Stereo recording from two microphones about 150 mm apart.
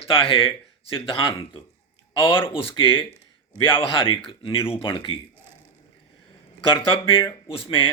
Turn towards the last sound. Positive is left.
turn(degrees=35)  # may be behind; listen again after turning